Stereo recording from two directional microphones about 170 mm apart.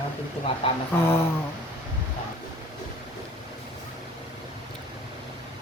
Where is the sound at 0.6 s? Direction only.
30° left (ahead or behind).